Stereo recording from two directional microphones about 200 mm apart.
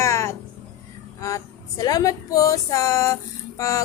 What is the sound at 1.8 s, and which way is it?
Speech, 20° left (ahead or behind).